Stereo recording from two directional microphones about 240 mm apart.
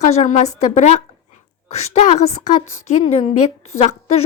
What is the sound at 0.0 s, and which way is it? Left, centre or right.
A woman's voice, left.